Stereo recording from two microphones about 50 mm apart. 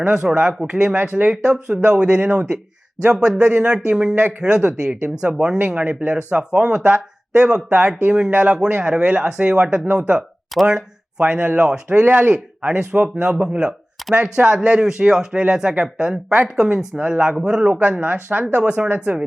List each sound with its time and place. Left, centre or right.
0.0 s speech: centre
0.9 s speech: right
3.4 s speech: right
3.7 s speech: centre
5.3 s speech: centre
5.5 s speech: right
6.1 s speech: right
10.5 s speech: centre
11.2 s speech: right